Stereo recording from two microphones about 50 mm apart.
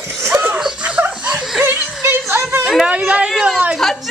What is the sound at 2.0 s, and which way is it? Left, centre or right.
Music, right.